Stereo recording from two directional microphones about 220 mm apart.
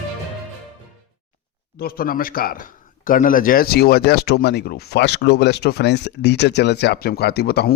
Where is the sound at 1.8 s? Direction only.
40° left (ahead or behind).